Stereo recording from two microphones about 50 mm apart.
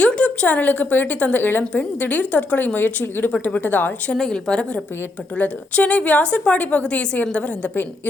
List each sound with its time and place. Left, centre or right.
0.0 s a woman's voice: left
4.1 s a woman's voice: centre